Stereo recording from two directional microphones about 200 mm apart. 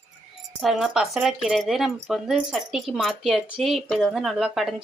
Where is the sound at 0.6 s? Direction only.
Centre (ahead or behind).